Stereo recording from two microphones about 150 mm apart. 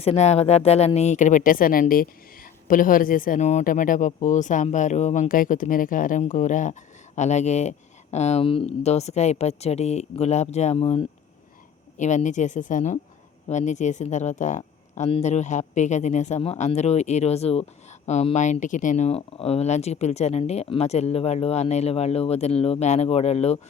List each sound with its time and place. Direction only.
0.0 s speech: 45° left (ahead or behind)
11.9 s speech: 55° left (ahead or behind)